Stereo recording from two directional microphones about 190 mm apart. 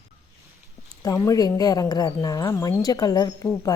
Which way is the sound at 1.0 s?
20° left (ahead or behind).